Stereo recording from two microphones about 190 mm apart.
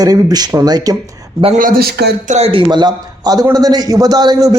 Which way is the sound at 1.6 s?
50° right (ahead or behind).